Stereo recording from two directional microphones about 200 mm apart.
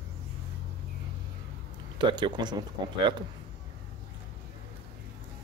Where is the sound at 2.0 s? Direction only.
25° right (ahead or behind).